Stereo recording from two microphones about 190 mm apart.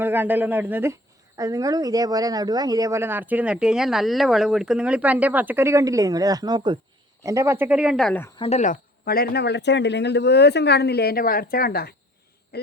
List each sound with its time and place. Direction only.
0.0 s speech: 10° right (ahead or behind)
8.4 s speech: 35° left (ahead or behind); by 11.9 s 50° left (ahead or behind)